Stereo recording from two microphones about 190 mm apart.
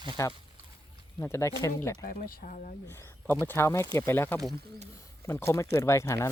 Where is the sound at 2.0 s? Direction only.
50° left (ahead or behind).